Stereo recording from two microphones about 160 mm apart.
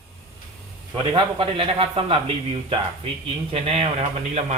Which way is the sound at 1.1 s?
35° right (ahead or behind).